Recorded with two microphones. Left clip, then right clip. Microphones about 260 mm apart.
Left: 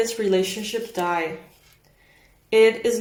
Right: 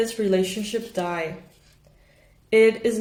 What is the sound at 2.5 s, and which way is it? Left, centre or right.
Speech, centre.